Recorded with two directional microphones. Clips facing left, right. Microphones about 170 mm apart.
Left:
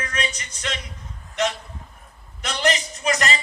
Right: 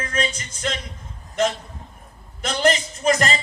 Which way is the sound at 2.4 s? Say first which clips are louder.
Right 3 dB; 50° right (ahead or behind).